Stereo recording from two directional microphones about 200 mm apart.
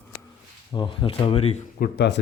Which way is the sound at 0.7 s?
25° left (ahead or behind).